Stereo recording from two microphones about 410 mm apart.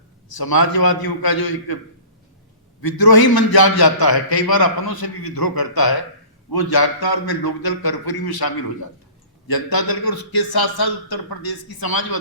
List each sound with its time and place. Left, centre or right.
0.3 s a man's voice: left
2.8 s a man's voice: left